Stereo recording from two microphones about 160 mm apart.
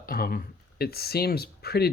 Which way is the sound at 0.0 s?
65° left (ahead or behind).